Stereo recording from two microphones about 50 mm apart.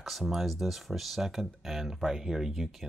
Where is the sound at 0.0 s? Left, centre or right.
Centre.